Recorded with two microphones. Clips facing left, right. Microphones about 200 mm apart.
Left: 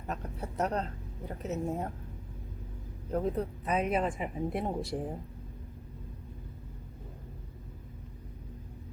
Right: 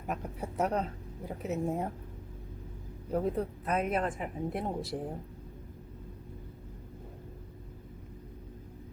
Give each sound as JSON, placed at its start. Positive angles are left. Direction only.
{"t": 0.1, "sound": "speech", "side_deg": -10}
{"t": 3.1, "sound": "speech", "side_deg": -5}